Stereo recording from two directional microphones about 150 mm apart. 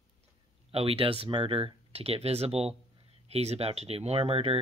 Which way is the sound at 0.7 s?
40° right (ahead or behind).